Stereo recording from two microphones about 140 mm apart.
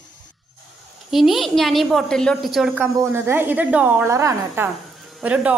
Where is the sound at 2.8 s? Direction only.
15° right (ahead or behind).